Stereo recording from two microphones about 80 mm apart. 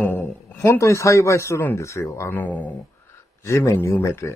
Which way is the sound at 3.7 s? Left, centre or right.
Left.